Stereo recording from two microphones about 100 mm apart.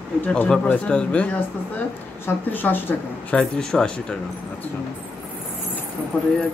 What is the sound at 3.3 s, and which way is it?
Speech, 10° left (ahead or behind).